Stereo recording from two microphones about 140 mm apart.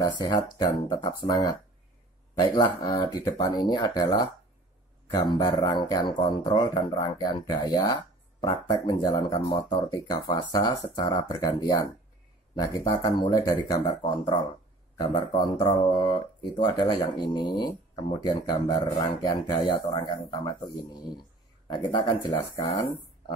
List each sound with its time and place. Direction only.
0.2 s speech: 30° left (ahead or behind)
3.3 s speech: 25° left (ahead or behind)
5.1 s speech: 35° left (ahead or behind)